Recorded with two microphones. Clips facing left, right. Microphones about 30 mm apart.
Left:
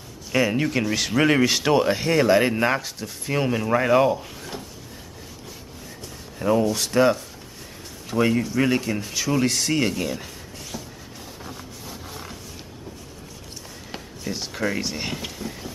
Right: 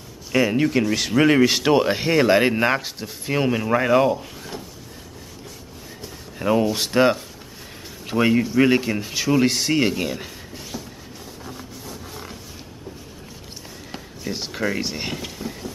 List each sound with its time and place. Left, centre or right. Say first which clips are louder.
0.3 s speech: right 3 dB; centre
6.4 s speech: right 1 dB; right
11.4 s a sound: right 2 dB; centre
14.3 s speech: right 1 dB; centre